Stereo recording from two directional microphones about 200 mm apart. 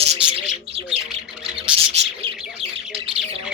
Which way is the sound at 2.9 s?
30° right (ahead or behind).